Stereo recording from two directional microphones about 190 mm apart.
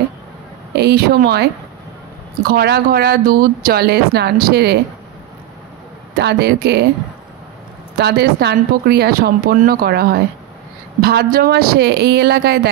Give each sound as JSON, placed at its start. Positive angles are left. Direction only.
{"t": 0.7, "sound": "speech", "side_deg": -55}
{"t": 2.5, "sound": "speech", "side_deg": -55}
{"t": 6.1, "sound": "speech", "side_deg": -60}
{"t": 8.0, "sound": "speech", "side_deg": -60}